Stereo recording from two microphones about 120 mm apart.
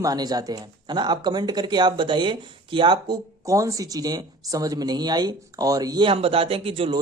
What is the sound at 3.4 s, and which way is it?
Speech, 25° right (ahead or behind).